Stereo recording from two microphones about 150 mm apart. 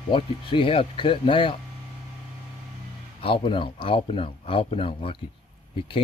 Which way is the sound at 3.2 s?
35° left (ahead or behind).